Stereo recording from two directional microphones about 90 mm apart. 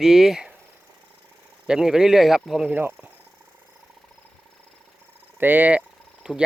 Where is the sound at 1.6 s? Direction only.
5° right (ahead or behind).